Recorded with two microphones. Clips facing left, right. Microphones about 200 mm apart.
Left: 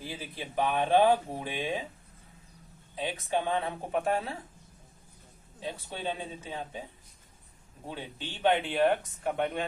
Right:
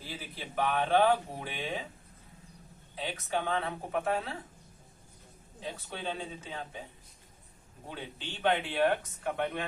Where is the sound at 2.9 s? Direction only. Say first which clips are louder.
Left 3 dB; 15° left (ahead or behind).